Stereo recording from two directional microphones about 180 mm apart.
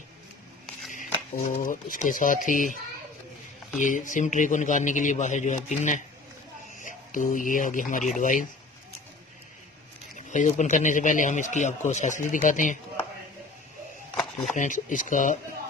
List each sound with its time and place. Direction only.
1.5 s a man's voice: 50° left (ahead or behind)
3.8 s a man's voice: 45° left (ahead or behind)
10.2 s a man's voice: 40° left (ahead or behind)
14.5 s a man's voice: 45° left (ahead or behind)